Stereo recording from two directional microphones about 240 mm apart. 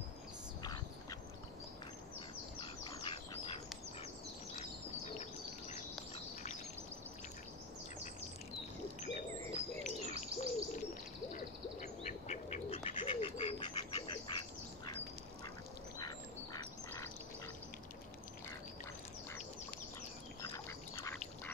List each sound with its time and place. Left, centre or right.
2.6 s bird: centre
5.0 s a sound: left
9.0 s bird: left
16.0 s duck: centre
20.4 s duck: centre